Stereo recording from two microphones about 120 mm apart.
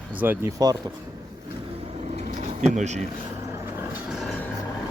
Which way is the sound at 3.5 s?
20° right (ahead or behind).